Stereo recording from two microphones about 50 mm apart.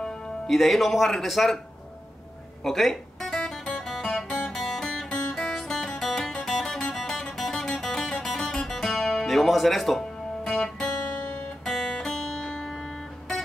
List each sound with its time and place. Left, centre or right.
0.5 s speech: centre
2.6 s guitar: centre
6.0 s music: centre
11.6 s music: centre
12.0 s music: centre
12.6 s music: centre